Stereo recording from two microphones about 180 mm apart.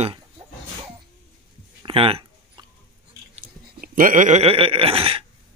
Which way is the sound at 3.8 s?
50° right (ahead or behind).